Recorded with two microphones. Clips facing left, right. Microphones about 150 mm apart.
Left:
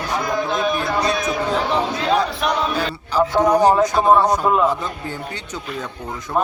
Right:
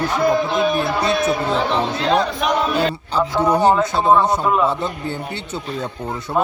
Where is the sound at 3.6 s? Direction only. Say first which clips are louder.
Left 1 dB; 25° right (ahead or behind).